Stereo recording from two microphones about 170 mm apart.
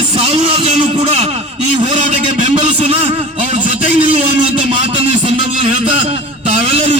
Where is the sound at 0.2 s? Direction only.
35° right (ahead or behind).